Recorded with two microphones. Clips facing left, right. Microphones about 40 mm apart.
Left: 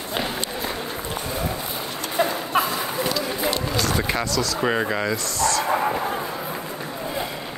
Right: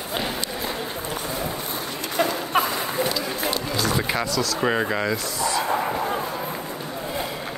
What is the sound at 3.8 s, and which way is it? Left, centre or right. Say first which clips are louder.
Speech: right 1 dB; centre.